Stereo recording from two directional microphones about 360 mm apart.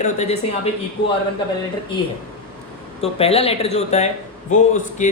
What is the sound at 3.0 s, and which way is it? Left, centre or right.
A man's voice, centre.